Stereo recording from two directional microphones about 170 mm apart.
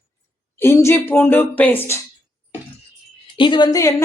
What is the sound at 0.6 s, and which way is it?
Speech, 15° left (ahead or behind).